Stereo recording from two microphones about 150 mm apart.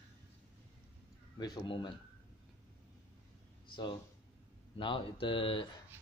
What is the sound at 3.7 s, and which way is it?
Speech, 35° left (ahead or behind).